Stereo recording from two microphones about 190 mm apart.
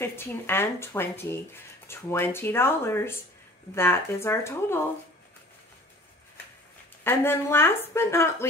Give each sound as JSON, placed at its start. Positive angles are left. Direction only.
{"t": 0.0, "sound": "speech", "side_deg": 10}
{"t": 7.1, "sound": "speech", "side_deg": 10}